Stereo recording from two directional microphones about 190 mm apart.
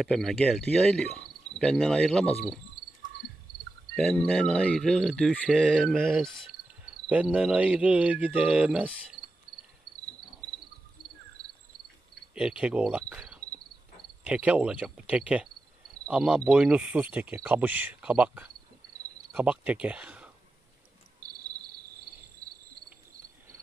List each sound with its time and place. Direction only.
0.0 s cricket: centre (ahead or behind)
3.9 s cricket: centre (ahead or behind)
7.1 s speech: 5° right (ahead or behind)
12.4 s cricket: 5° right (ahead or behind)
14.2 s speech: 5° right (ahead or behind)
21.2 s cricket: 55° right (ahead or behind)